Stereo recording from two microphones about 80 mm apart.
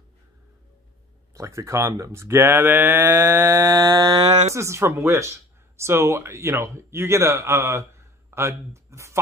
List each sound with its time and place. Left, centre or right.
1.3 s speech: right
3.5 s a sound: right
4.6 s speech: right